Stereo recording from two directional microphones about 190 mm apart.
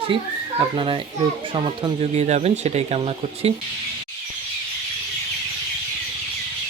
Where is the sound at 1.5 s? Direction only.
30° right (ahead or behind).